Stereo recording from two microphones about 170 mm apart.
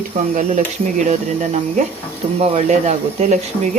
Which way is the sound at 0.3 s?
45° right (ahead or behind).